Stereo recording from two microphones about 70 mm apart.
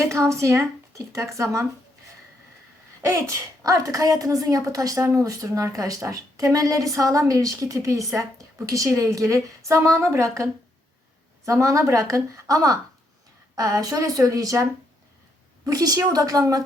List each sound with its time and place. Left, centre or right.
0.0 s speech: right
3.1 s speech: right
3.6 s a woman's voice: right